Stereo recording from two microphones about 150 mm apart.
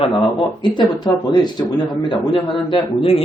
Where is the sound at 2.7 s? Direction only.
40° left (ahead or behind).